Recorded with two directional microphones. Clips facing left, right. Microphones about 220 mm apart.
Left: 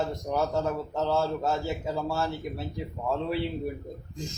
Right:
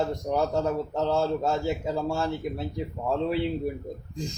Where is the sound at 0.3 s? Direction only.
15° right (ahead or behind).